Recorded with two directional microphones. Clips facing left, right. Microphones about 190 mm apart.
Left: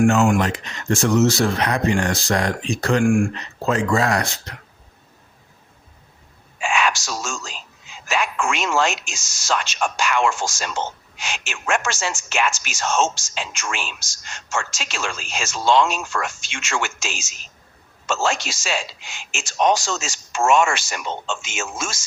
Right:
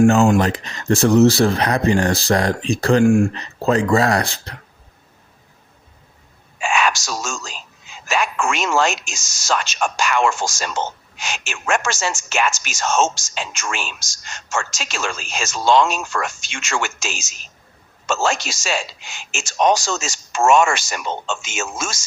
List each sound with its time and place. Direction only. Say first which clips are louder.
0.0 s speech: right 3 dB; 35° right (ahead or behind)
6.6 s a sound: right 2 dB; 45° right (ahead or behind)
8.0 s speech: right 2 dB; 45° right (ahead or behind)